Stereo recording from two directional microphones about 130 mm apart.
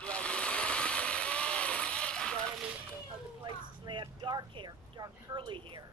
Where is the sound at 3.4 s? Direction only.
30° right (ahead or behind).